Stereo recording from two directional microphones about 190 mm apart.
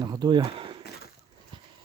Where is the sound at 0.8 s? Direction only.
55° left (ahead or behind).